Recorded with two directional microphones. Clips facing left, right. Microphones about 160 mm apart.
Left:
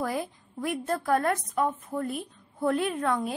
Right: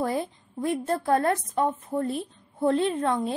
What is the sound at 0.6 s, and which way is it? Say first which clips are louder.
A woman's voice: right 3 dB; 25° right (ahead or behind).